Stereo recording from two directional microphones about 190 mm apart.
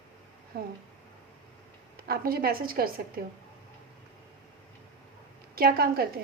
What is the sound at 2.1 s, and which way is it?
A woman's voice, 50° right (ahead or behind).